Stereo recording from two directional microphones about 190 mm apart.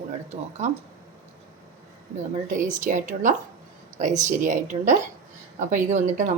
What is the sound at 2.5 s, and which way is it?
A woman's voice, 40° right (ahead or behind).